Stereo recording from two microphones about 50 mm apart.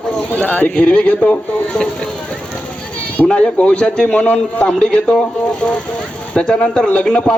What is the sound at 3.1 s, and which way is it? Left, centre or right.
A man's voice, left.